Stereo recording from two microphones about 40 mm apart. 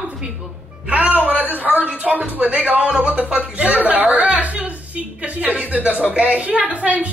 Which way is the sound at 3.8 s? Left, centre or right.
Right.